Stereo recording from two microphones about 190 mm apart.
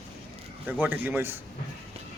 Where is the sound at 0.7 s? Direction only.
10° right (ahead or behind).